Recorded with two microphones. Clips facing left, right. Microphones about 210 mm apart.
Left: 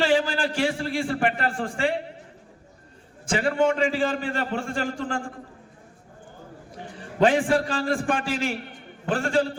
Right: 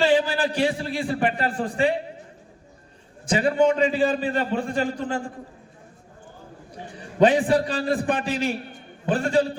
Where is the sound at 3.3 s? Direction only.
20° right (ahead or behind).